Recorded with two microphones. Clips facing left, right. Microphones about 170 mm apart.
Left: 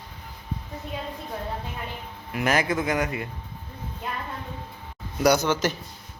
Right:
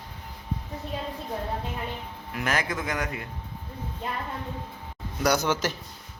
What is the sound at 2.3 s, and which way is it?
Speech, 10° left (ahead or behind).